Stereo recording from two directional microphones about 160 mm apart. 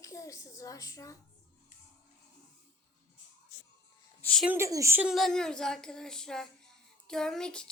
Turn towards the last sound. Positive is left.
turn(degrees=5)  # may be behind; listen again after turning